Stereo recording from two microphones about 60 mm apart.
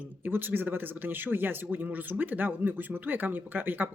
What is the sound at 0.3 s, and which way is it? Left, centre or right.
A man's voice, right.